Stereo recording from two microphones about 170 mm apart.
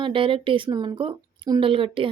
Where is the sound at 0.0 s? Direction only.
30° right (ahead or behind).